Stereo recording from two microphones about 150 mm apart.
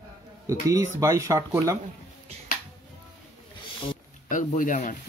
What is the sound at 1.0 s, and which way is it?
Speech, 20° right (ahead or behind).